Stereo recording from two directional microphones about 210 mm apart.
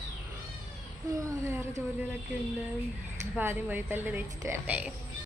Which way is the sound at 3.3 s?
10° right (ahead or behind).